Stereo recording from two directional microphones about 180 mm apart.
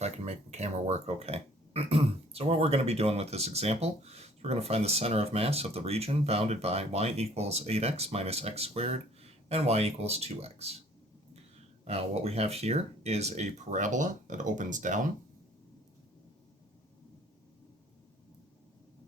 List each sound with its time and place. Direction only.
0.0 s speech: 40° right (ahead or behind)
11.9 s speech: 35° right (ahead or behind)